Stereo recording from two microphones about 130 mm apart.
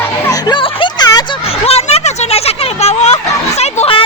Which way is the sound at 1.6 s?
50° left (ahead or behind).